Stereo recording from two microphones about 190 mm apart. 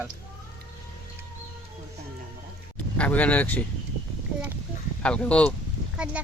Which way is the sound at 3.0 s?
10° left (ahead or behind).